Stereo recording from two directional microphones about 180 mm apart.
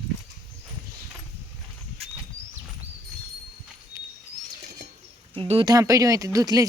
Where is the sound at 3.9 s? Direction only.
20° right (ahead or behind).